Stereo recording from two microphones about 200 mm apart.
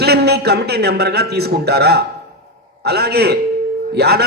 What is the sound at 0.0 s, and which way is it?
A man's voice, 55° right (ahead or behind).